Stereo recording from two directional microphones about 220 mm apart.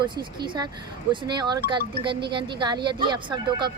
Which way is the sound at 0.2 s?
20° right (ahead or behind).